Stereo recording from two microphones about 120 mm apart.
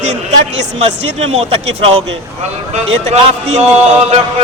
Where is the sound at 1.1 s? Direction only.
60° right (ahead or behind).